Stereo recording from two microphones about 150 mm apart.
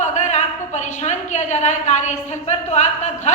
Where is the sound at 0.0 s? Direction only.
50° left (ahead or behind).